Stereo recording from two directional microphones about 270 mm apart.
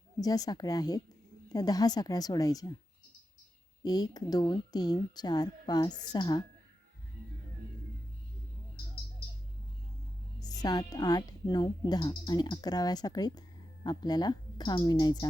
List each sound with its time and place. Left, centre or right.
0.2 s speech: centre
3.8 s speech: centre
10.4 s speech: centre